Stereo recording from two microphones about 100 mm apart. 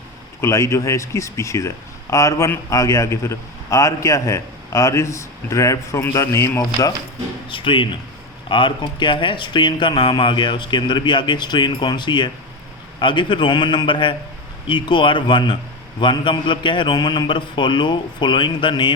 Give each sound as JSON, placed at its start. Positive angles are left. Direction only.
{"t": 0.4, "sound": "speech", "side_deg": 30}
{"t": 7.5, "sound": "speech", "side_deg": 55}